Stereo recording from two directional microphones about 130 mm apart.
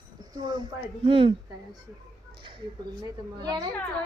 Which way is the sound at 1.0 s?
45° right (ahead or behind).